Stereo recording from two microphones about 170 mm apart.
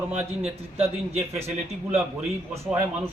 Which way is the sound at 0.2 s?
10° right (ahead or behind).